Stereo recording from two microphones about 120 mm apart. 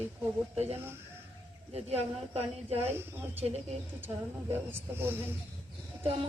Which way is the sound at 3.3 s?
60° right (ahead or behind).